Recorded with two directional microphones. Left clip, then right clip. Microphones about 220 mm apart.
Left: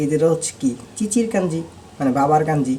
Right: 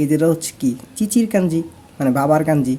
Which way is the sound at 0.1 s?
55° right (ahead or behind).